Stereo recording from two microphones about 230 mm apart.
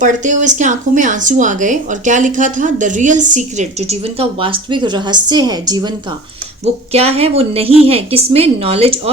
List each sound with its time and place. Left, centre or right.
0.0 s a woman's voice: right